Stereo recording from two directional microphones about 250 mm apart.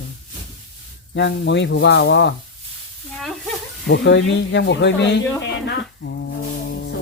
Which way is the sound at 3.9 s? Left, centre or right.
Left.